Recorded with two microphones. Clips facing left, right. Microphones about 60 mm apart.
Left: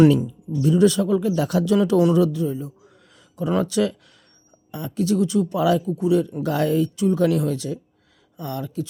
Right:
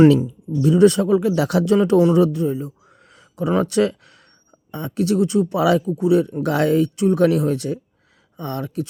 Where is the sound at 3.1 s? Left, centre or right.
Right.